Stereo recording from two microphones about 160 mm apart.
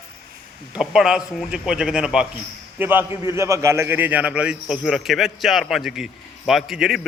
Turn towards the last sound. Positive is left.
turn(degrees=0)  # may be behind; listen again after turning